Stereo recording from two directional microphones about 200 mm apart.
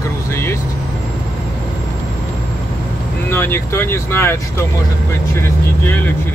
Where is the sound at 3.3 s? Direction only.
10° left (ahead or behind).